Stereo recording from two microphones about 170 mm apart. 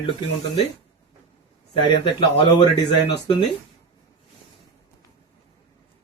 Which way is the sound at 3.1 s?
30° left (ahead or behind).